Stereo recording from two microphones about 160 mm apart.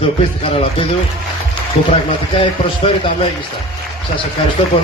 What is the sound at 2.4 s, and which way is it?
Speech, 35° left (ahead or behind).